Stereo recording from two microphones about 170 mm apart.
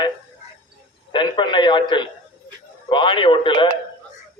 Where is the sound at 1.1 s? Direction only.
25° left (ahead or behind).